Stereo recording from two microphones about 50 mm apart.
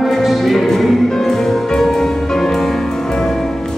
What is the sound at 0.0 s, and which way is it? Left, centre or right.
Music, centre.